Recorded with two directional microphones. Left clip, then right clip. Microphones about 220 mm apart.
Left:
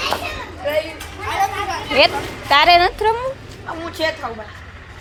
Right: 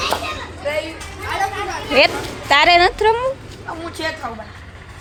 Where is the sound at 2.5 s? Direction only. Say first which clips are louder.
Even; 15° right (ahead or behind).